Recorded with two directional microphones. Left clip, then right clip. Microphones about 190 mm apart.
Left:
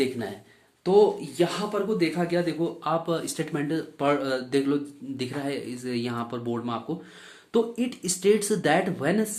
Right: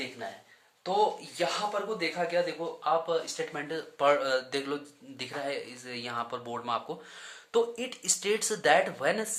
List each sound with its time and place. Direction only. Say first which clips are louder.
1.4 s speech: left 3 dB; 10° left (ahead or behind); by 3.4 s 30° left (ahead or behind)
3.5 s speech: left 6 dB; 5° left (ahead or behind)